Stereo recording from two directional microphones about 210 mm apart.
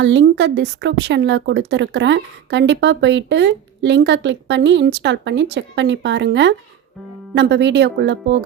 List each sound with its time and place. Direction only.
0.0 s speech: 60° right (ahead or behind)